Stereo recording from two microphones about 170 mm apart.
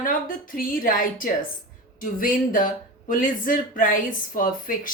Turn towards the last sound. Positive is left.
turn(degrees=55)  # may be behind; listen again after turning